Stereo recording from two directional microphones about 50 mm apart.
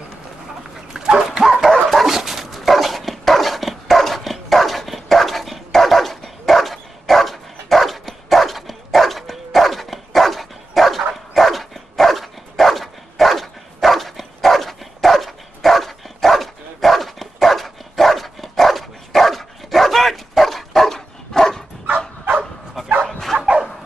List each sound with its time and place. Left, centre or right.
0.9 s dog: centre
23.0 s bow-wow: centre
23.3 s dog: centre